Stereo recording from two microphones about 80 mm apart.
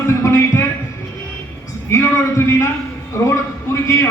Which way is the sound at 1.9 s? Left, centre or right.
Left.